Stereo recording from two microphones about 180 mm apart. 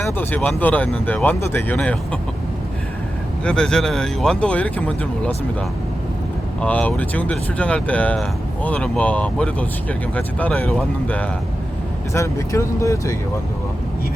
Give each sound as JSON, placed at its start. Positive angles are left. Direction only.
{"t": 0.0, "sound": "speech", "side_deg": 10}
{"t": 3.4, "sound": "speech", "side_deg": 5}
{"t": 6.6, "sound": "speech", "side_deg": 5}